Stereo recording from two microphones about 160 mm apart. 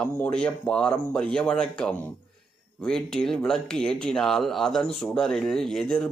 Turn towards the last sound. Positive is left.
turn(degrees=5)  # may be behind; listen again after turning